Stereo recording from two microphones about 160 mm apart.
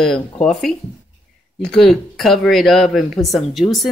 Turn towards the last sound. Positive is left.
turn(degrees=0)  # may be behind; listen again after turning